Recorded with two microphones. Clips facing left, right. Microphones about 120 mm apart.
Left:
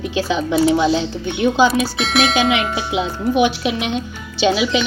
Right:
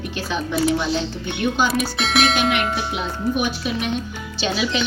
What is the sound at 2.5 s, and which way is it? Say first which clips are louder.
Speech: left 3 dB; 90° left.